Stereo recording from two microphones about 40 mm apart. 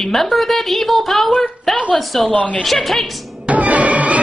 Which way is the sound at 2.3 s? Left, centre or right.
Left.